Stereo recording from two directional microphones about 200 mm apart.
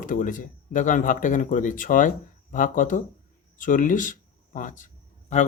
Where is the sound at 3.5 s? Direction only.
40° left (ahead or behind).